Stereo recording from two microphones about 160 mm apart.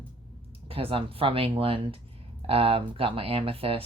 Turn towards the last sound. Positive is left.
turn(degrees=-35)  # may be behind; listen again after turning